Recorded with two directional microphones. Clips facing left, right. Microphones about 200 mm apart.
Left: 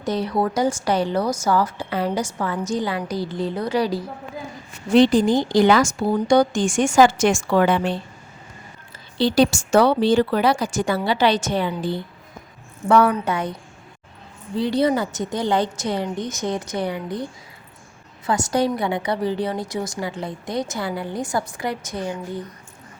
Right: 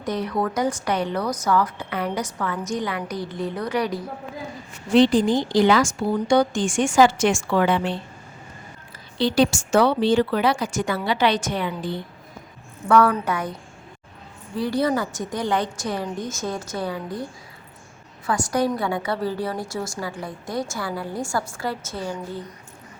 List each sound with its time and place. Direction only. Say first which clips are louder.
0.0 s speech: left 3 dB; 30° left (ahead or behind)
4.9 s a woman's voice: left 2 dB; 40° left (ahead or behind)
9.1 s a woman's voice: left 2 dB; 35° left (ahead or behind)
14.5 s a woman's voice: left 3 dB; 25° left (ahead or behind)
18.3 s a woman's voice: left 2 dB; 25° left (ahead or behind)